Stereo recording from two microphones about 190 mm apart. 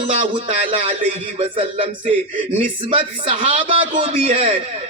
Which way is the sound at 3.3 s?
30° right (ahead or behind).